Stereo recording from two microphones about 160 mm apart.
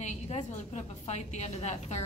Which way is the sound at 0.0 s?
45° left (ahead or behind).